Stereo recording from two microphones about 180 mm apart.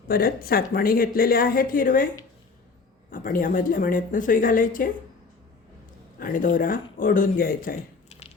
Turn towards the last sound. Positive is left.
turn(degrees=50)  # may be behind; listen again after turning